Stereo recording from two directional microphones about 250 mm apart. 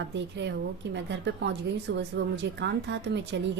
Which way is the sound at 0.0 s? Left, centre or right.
Right.